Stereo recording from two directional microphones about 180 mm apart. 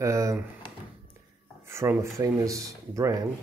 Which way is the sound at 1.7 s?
15° right (ahead or behind).